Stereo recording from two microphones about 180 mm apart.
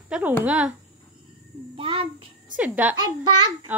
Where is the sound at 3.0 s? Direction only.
25° right (ahead or behind).